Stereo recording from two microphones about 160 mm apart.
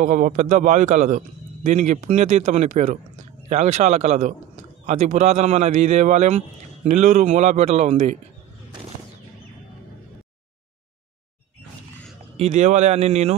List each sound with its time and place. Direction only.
0.0 s a man's voice: 50° right (ahead or behind)
12.4 s a man's voice: 45° right (ahead or behind)